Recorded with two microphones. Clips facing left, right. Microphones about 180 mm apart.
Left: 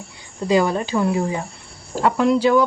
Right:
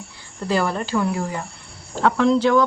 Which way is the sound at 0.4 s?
15° left (ahead or behind).